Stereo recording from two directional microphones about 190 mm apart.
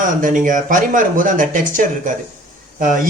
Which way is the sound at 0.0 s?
45° right (ahead or behind).